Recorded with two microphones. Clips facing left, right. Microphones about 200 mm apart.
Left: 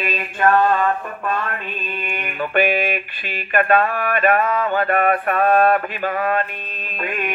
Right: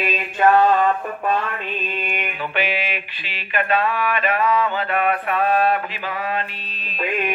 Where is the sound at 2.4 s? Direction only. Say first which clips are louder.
Left 8 dB; 50° left (ahead or behind).